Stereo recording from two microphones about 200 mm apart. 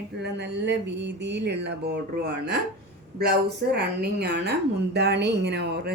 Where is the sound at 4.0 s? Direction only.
55° right (ahead or behind).